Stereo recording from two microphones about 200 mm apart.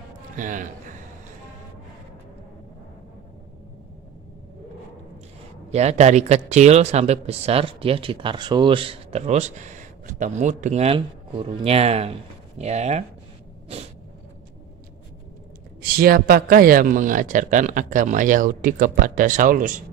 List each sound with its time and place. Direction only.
0.4 s a man's voice: 40° right (ahead or behind)
5.7 s a man's voice: 35° right (ahead or behind)
15.8 s a man's voice: 45° right (ahead or behind)